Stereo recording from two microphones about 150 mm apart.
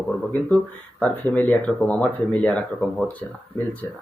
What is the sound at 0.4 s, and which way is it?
Speech, 10° left (ahead or behind).